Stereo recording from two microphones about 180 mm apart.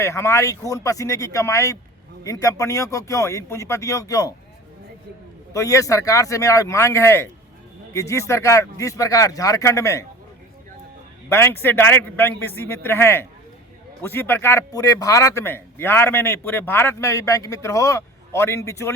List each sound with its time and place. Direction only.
0.0 s a man's voice: 15° left (ahead or behind)
5.5 s a man's voice: 20° left (ahead or behind)
11.3 s a man's voice: 15° left (ahead or behind)